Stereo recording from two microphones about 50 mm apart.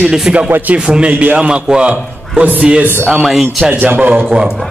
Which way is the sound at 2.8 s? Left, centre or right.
Right.